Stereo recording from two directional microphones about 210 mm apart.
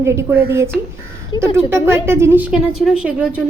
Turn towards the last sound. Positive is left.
turn(degrees=-5)  # may be behind; listen again after turning